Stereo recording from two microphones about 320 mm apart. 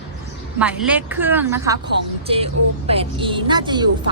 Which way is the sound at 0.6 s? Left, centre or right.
Centre.